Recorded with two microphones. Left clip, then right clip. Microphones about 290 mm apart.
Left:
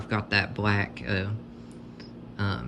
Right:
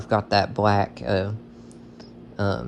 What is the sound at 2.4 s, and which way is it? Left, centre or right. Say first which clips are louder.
Speech: right 7 dB; centre.